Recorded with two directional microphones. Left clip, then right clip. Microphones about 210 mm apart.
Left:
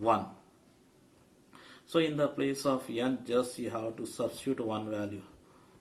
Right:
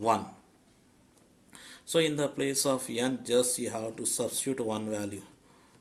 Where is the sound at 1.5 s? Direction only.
40° right (ahead or behind).